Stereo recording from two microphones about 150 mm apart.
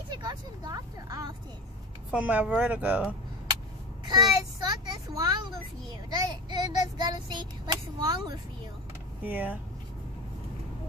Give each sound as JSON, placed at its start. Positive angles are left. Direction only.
{"t": 0.1, "sound": "vehicle", "side_deg": -25}
{"t": 2.0, "sound": "a woman's voice", "side_deg": -10}
{"t": 4.0, "sound": "a child's voice", "side_deg": -25}
{"t": 9.2, "sound": "a woman's voice", "side_deg": -10}